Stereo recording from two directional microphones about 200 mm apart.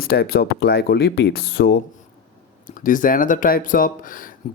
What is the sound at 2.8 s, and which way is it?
Speech, 40° left (ahead or behind).